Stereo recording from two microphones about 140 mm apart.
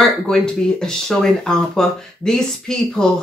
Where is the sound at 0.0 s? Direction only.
5° left (ahead or behind).